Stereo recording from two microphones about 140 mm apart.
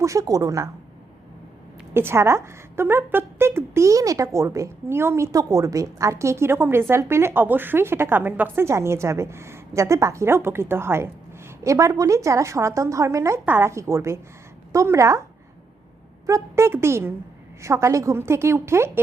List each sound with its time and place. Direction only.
0.0 s speech: 25° right (ahead or behind)
1.9 s speech: 15° right (ahead or behind)
16.2 s speech: 20° right (ahead or behind)